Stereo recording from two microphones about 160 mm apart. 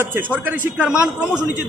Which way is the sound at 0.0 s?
10° right (ahead or behind).